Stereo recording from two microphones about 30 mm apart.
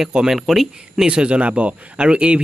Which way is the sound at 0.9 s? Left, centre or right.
Right.